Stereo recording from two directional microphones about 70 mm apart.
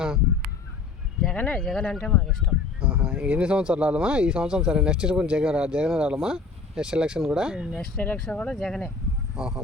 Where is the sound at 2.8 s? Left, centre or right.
Centre.